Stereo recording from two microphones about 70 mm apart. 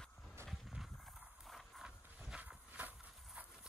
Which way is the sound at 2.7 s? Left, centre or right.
Right.